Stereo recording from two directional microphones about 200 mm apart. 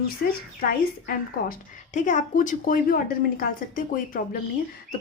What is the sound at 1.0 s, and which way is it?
Speech, 40° left (ahead or behind).